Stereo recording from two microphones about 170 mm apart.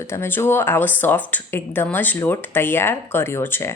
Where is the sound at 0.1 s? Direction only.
15° left (ahead or behind).